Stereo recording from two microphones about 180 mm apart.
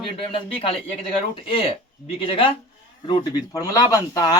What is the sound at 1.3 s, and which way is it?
Speech, 30° left (ahead or behind).